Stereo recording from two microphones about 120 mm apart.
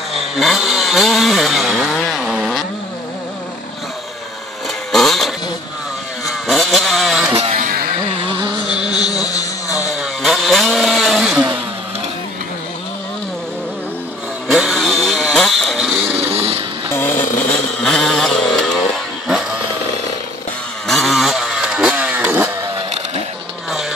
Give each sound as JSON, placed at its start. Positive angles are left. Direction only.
{"t": 0.1, "sound": "chainsaw", "side_deg": 0}
{"t": 4.9, "sound": "vehicle", "side_deg": 0}
{"t": 6.4, "sound": "vehicle", "side_deg": 0}
{"t": 7.3, "sound": "a sound", "side_deg": -65}
{"t": 8.8, "sound": "a sound", "side_deg": 35}
{"t": 9.9, "sound": "chainsaw", "side_deg": 0}
{"t": 14.5, "sound": "vehicle", "side_deg": -5}
{"t": 16.3, "sound": "music", "side_deg": -55}
{"t": 16.9, "sound": "a sound", "side_deg": 15}
{"t": 17.5, "sound": "music", "side_deg": 5}
{"t": 20.8, "sound": "vehicle", "side_deg": 0}